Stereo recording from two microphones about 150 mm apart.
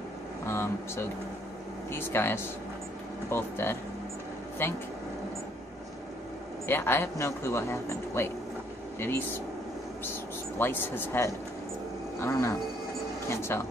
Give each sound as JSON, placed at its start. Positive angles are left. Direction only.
{"t": 0.5, "sound": "speech", "side_deg": 15}
{"t": 6.7, "sound": "speech", "side_deg": 15}
{"t": 10.6, "sound": "speech", "side_deg": 15}